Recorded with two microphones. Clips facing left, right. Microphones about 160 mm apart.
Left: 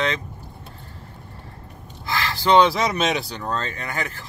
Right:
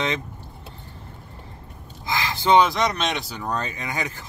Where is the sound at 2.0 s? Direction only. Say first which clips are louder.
Even; 20° right (ahead or behind).